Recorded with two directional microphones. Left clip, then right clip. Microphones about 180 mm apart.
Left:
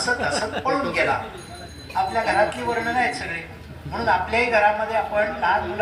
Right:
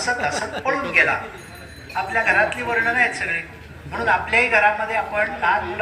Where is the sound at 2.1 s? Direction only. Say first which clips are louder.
Right 4 dB; 70° left (ahead or behind).